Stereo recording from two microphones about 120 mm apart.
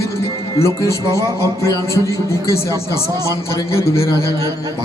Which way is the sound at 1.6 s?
30° right (ahead or behind).